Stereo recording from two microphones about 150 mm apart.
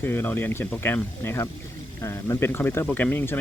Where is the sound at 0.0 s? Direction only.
15° left (ahead or behind).